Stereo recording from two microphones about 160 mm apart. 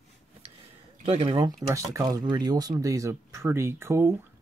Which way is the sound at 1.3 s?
20° right (ahead or behind).